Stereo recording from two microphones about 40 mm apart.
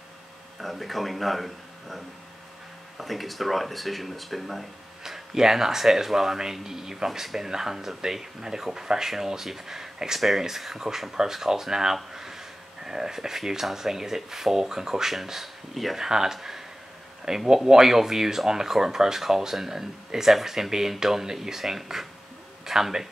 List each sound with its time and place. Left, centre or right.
0.6 s speech: centre
5.0 s speech: centre